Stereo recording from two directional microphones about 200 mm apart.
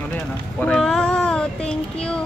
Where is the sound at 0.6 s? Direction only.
5° left (ahead or behind).